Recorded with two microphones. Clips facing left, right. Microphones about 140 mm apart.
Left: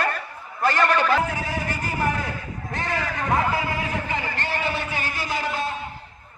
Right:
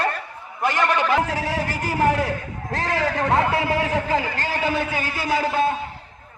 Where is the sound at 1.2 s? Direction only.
90° right.